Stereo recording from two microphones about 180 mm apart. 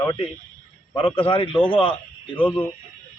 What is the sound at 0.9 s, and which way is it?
A man's voice, 30° left (ahead or behind).